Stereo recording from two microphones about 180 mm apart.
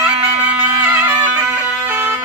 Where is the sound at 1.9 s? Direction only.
10° right (ahead or behind).